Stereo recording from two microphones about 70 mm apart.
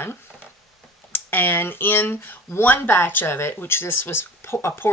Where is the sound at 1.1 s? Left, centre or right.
Left.